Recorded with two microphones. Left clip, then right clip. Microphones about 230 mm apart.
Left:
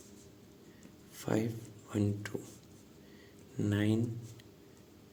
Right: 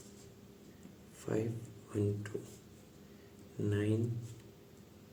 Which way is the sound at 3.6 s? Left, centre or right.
Left.